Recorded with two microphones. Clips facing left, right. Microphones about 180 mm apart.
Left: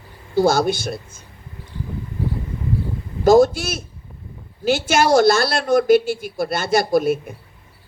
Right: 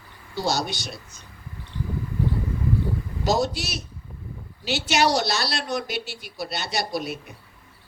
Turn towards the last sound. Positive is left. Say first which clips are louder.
# left 11 dB
turn(degrees=50)  # may be behind; listen again after turning